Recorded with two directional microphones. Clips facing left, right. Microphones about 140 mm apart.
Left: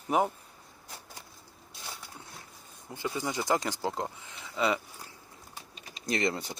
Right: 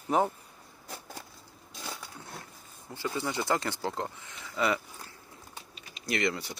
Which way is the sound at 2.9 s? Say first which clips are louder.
Even; 15° left (ahead or behind).